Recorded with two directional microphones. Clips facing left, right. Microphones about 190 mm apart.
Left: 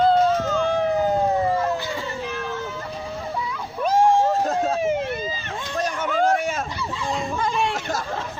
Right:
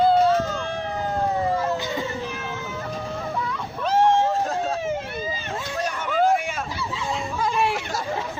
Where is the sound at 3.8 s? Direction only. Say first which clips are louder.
Left 1 dB; 10° left (ahead or behind).